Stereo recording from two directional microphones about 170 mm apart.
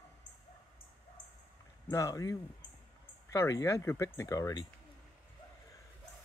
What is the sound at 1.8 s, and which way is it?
Speech, 20° left (ahead or behind).